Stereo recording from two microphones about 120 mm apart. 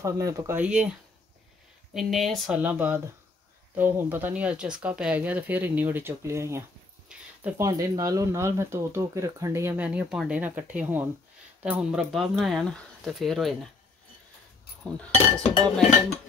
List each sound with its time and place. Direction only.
0.0 s speech: 25° right (ahead or behind)
0.6 s speech: 10° right (ahead or behind)
2.0 s speech: centre (ahead or behind)
2.6 s speech: 15° right (ahead or behind)
7.1 s a sound: 10° right (ahead or behind)
7.5 s speech: 30° right (ahead or behind)
9.8 s speech: 10° right (ahead or behind)
14.9 s speech: 10° left (ahead or behind)